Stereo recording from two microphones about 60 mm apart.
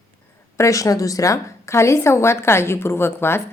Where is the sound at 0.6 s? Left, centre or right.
Left.